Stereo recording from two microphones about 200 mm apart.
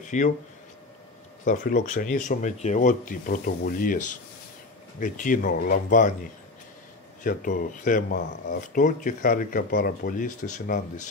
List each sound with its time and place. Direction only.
0.0 s speech: 40° left (ahead or behind)
1.4 s speech: 40° left (ahead or behind)
7.2 s speech: 40° left (ahead or behind)